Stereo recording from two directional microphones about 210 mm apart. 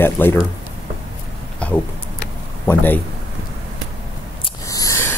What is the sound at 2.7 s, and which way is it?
Speech, 10° left (ahead or behind).